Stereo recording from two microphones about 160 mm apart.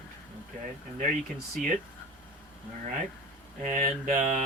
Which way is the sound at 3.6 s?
55° right (ahead or behind).